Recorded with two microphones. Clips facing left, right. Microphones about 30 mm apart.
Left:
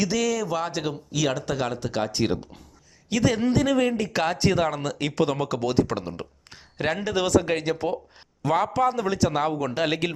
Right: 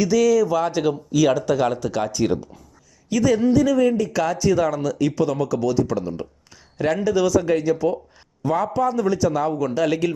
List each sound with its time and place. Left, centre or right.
0.0 s a man's voice: left
6.7 s a man's voice: left
8.4 s a man's voice: left